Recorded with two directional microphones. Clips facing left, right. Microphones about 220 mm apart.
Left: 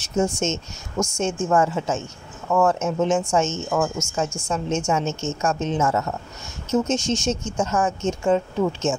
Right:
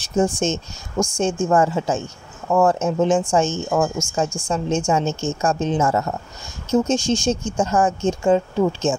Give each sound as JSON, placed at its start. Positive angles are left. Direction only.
{"t": 0.0, "sound": "speech", "side_deg": -30}